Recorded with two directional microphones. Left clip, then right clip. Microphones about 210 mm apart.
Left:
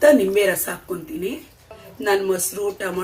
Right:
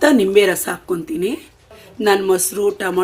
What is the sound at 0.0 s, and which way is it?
Speech, 45° right (ahead or behind).